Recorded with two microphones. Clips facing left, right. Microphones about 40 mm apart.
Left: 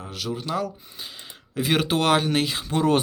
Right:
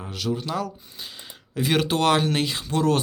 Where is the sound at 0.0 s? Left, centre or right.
Centre.